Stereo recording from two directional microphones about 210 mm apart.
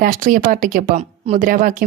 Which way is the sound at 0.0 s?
40° right (ahead or behind).